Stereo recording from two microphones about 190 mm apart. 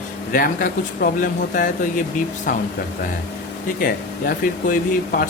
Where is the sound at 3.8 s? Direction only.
50° left (ahead or behind).